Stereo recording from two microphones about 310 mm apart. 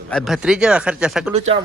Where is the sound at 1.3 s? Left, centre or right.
Centre.